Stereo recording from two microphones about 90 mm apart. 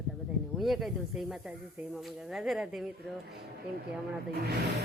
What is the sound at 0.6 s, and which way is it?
Speech, centre (ahead or behind).